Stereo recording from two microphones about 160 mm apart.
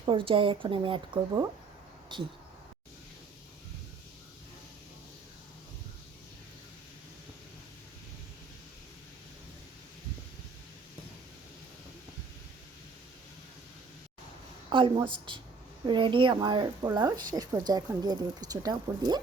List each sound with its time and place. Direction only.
0.0 s a woman's voice: 30° right (ahead or behind)
14.7 s a woman's voice: 30° right (ahead or behind)